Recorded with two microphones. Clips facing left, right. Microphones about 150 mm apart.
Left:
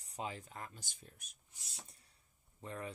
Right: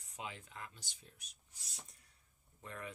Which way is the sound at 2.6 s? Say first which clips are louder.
Left 3 dB; 30° left (ahead or behind).